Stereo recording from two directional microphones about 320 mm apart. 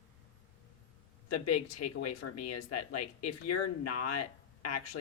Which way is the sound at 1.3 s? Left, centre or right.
Left.